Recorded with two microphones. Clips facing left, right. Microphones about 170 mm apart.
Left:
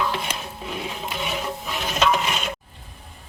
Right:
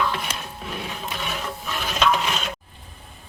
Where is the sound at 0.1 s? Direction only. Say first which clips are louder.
Left 1 dB; 10° left (ahead or behind).